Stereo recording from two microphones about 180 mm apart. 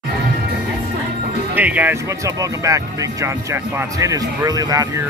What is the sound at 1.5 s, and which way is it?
Speech, 10° right (ahead or behind).